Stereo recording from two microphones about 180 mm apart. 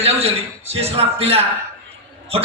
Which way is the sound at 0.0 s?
35° right (ahead or behind).